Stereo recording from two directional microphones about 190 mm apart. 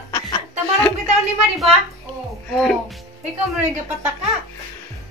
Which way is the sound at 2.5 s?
Centre (ahead or behind).